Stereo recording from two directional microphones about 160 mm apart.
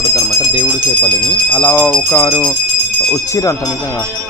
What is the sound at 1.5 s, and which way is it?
Speech, 15° left (ahead or behind).